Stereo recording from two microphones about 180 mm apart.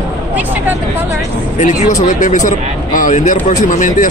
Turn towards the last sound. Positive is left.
turn(degrees=45)  # may be behind; listen again after turning